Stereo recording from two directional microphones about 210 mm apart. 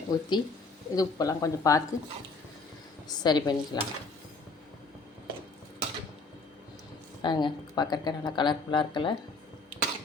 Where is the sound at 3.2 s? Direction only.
20° left (ahead or behind).